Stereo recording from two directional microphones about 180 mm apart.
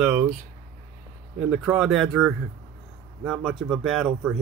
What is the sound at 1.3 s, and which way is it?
Speech, 5° right (ahead or behind).